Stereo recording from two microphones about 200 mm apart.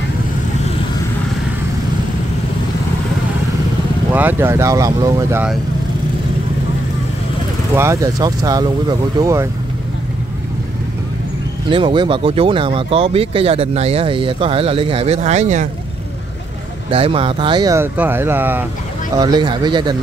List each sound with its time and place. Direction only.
4.1 s speech: 10° right (ahead or behind)
7.7 s speech: 15° right (ahead or behind)
11.7 s speech: 25° right (ahead or behind)
16.9 s speech: 25° right (ahead or behind); by 18.7 s 10° right (ahead or behind)
19.1 s speech: 20° right (ahead or behind)